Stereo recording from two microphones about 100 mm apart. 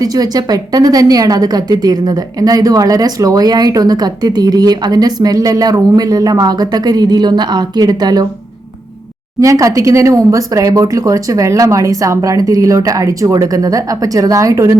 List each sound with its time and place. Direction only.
0.0 s a woman's voice: 40° right (ahead or behind)
9.4 s a woman's voice: 35° right (ahead or behind)